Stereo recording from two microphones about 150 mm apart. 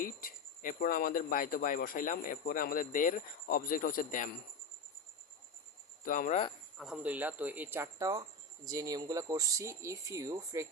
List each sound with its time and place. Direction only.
0.0 s speech: 70° left (ahead or behind)
6.1 s speech: 60° left (ahead or behind)
6.7 s speech: 5° right (ahead or behind); by 10.7 s 20° right (ahead or behind)